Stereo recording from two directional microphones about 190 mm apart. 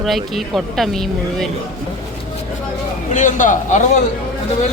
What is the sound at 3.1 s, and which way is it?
Speech, 40° left (ahead or behind).